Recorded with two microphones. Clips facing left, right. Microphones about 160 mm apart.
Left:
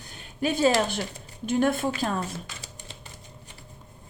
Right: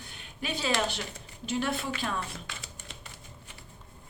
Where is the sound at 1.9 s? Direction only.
40° left (ahead or behind).